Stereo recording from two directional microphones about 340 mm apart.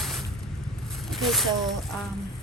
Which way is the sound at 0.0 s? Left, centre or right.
Centre.